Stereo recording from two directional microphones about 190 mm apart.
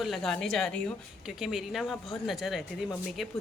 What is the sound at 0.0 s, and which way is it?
A woman's voice, centre (ahead or behind).